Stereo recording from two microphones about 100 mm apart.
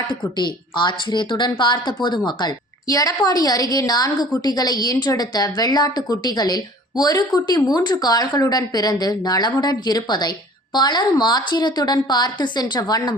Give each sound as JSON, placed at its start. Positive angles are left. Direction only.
{"t": 0.3, "sound": "a woman's voice", "side_deg": 50}